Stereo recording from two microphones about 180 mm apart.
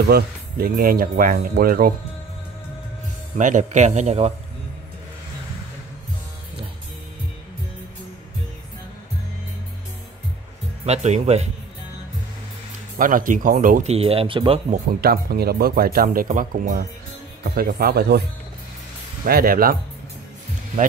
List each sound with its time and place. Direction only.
0.1 s speech: 55° right (ahead or behind)
3.3 s a man's voice: 45° right (ahead or behind)
10.9 s a man's voice: 40° right (ahead or behind)
12.9 s speech: 50° right (ahead or behind)
13.9 s a man's voice: 30° right (ahead or behind)
14.7 s speech: 60° right (ahead or behind)
19.2 s speech: 55° right (ahead or behind)